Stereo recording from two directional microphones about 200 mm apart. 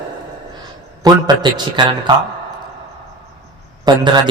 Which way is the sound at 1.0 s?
20° right (ahead or behind).